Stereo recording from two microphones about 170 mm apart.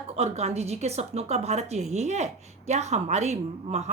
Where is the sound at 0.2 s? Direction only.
40° right (ahead or behind).